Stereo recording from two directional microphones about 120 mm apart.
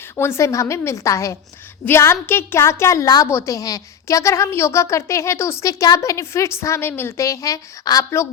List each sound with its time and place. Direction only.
0.2 s a woman's voice: 25° left (ahead or behind)